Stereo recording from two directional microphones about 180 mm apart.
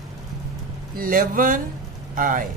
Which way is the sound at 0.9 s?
50° right (ahead or behind).